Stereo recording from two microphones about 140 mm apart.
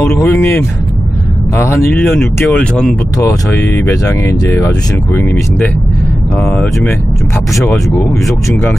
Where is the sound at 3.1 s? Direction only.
15° left (ahead or behind).